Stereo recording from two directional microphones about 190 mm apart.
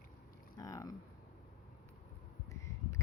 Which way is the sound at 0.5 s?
20° left (ahead or behind).